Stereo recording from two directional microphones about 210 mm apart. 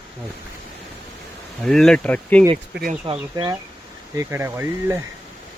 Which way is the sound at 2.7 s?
45° right (ahead or behind).